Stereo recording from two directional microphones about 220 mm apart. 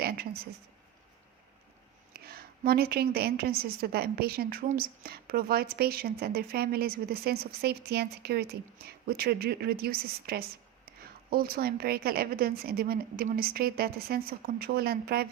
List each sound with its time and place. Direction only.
2.1 s a woman's voice: 45° right (ahead or behind)